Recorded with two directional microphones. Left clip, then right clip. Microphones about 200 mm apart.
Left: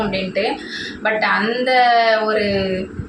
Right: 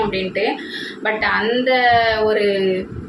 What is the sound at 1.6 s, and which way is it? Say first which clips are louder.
Speech: left 2 dB; 5° right (ahead or behind).